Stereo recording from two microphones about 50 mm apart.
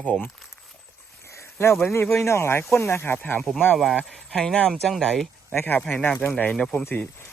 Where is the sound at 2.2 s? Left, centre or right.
Left.